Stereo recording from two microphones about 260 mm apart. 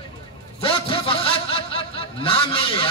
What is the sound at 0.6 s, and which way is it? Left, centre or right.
Speech, left.